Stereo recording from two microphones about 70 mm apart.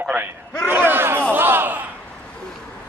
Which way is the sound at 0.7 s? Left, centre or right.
Right.